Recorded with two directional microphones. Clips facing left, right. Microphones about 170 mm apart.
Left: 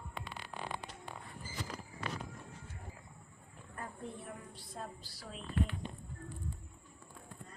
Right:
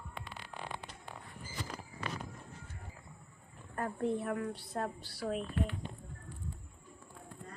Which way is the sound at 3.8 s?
65° right (ahead or behind).